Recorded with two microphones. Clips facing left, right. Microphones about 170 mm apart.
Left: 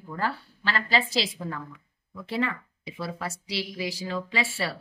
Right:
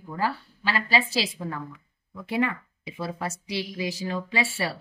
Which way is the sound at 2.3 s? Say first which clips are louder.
Right 3 dB; 15° right (ahead or behind).